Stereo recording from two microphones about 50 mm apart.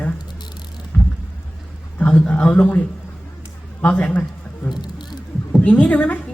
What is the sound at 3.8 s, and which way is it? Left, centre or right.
A man's voice, left.